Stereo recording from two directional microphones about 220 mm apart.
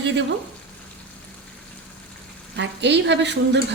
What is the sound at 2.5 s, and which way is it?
A woman's voice, 55° right (ahead or behind).